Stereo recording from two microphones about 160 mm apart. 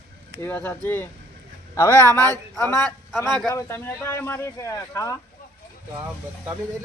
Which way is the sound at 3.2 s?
Centre (ahead or behind).